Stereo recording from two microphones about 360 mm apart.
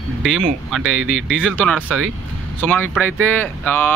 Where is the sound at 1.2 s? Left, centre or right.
Centre.